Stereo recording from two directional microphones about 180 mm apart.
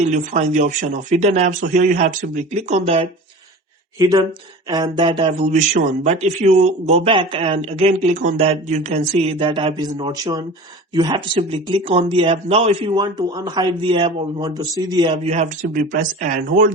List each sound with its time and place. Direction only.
0.0 s speech: 40° right (ahead or behind)
3.9 s speech: 20° right (ahead or behind); by 13.0 s 35° right (ahead or behind)
13.0 s speech: 20° right (ahead or behind); by 16.7 s 45° right (ahead or behind)